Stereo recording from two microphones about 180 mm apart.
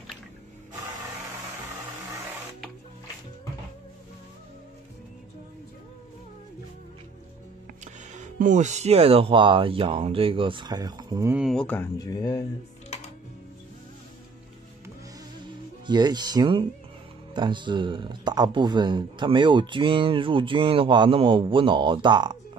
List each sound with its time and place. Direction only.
7.8 s speech: 40° right (ahead or behind); by 11.3 s 20° right (ahead or behind)
11.3 s speech: centre (ahead or behind)
11.6 s speech: 10° left (ahead or behind)
15.9 s speech: 25° right (ahead or behind)